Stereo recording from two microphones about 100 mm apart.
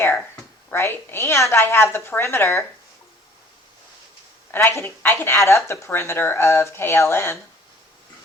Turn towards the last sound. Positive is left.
turn(degrees=25)  # may be behind; listen again after turning